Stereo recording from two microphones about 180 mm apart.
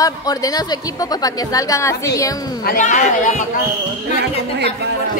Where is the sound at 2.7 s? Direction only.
45° left (ahead or behind).